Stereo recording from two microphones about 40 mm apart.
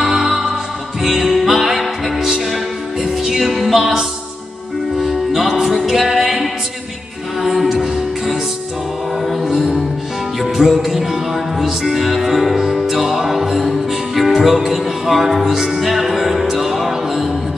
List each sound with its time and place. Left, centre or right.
0.0 s music: centre
5.0 s music: centre
7.7 s music: centre
9.4 s music: centre